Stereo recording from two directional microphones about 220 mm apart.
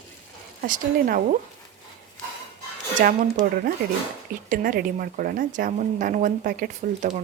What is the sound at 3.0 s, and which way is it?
A woman's voice, 35° right (ahead or behind).